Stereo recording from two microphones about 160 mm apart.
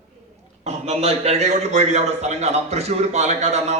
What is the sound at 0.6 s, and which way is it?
A man's voice, 40° right (ahead or behind).